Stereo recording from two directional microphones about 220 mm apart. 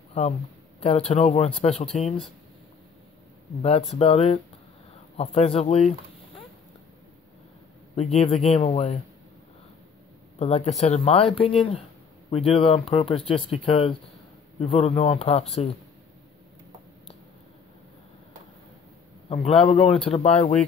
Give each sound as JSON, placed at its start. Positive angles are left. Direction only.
{"t": 0.7, "sound": "speech", "side_deg": 30}
{"t": 3.9, "sound": "speech", "side_deg": 25}
{"t": 7.9, "sound": "speech", "side_deg": 30}
{"t": 10.4, "sound": "speech", "side_deg": 30}
{"t": 19.2, "sound": "a man's voice", "side_deg": 25}